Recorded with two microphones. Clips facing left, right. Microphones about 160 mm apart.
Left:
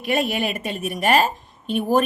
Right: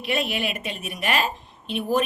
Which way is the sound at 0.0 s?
45° left (ahead or behind).